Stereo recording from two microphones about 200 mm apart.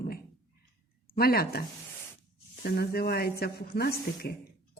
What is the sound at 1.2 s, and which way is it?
Speech, 50° left (ahead or behind).